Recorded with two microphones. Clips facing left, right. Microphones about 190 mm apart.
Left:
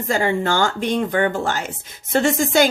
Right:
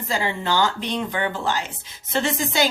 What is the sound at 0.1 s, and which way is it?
A woman's voice, 50° left (ahead or behind).